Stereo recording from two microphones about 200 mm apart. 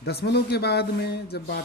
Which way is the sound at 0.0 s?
55° left (ahead or behind).